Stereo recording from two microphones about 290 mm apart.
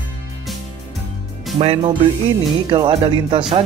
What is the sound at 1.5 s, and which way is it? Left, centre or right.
Music, right.